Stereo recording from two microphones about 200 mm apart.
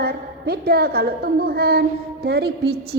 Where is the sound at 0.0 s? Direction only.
50° right (ahead or behind).